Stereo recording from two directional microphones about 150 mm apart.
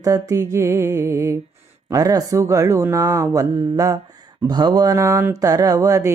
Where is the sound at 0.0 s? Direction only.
25° right (ahead or behind).